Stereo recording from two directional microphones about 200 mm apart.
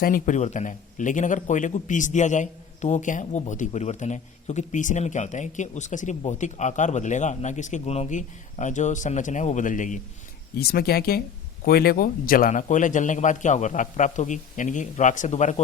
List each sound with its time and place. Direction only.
0.0 s speech: 40° left (ahead or behind)
10.5 s speech: 50° left (ahead or behind); by 15.6 s 35° left (ahead or behind)